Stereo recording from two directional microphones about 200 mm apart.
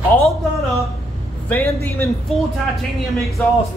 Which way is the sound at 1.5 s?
10° left (ahead or behind).